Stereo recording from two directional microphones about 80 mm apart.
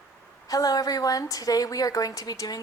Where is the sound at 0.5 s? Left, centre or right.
Left.